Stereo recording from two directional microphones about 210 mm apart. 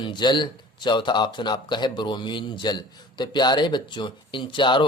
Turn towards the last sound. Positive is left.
turn(degrees=25)  # may be behind; listen again after turning